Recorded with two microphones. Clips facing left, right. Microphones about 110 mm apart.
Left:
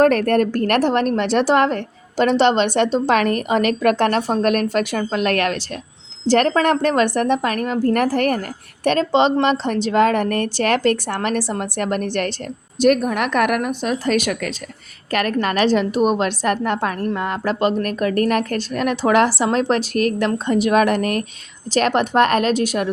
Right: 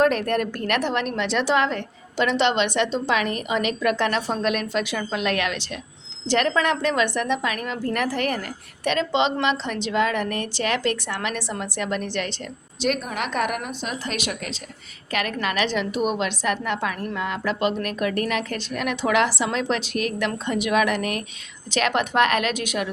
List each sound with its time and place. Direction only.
0.0 s a woman's voice: 45° left (ahead or behind)